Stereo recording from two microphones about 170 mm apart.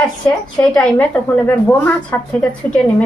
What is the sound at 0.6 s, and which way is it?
A woman's voice, 10° left (ahead or behind).